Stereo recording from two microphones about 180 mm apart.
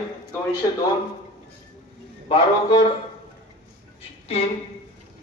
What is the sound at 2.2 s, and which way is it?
Speech, 25° left (ahead or behind).